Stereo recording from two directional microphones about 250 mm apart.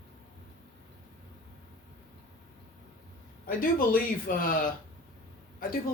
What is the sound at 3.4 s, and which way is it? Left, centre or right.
Speech, left.